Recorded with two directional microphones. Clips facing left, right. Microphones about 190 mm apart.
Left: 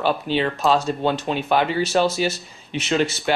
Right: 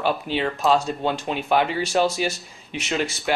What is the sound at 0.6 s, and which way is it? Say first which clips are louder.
Speech: right 1 dB; centre (ahead or behind).